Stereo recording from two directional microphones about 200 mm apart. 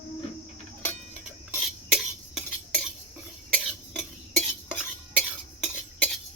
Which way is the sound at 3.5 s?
Centre (ahead or behind).